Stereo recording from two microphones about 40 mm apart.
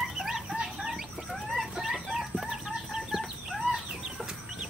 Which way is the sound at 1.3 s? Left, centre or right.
Centre.